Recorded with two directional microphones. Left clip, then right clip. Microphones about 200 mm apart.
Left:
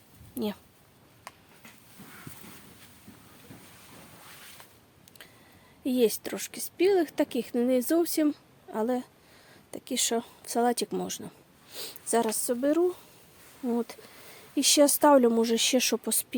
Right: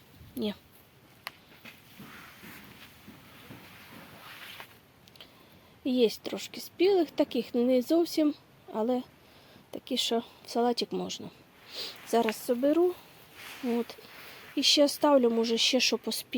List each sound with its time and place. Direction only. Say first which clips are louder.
0.3 s speech: left 1 dB; 5° left (ahead or behind)
5.8 s speech: left 1 dB; 5° left (ahead or behind)
13.7 s speech: left 1 dB; 10° left (ahead or behind)